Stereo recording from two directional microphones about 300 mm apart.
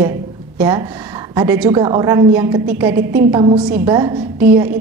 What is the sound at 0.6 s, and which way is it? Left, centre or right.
A woman's voice, centre.